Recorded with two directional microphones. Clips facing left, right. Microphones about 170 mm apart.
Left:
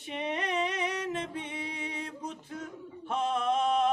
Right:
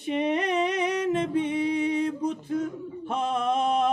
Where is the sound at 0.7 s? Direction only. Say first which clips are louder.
Right 8 dB; 65° right (ahead or behind).